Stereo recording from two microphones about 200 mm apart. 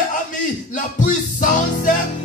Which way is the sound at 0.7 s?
40° left (ahead or behind).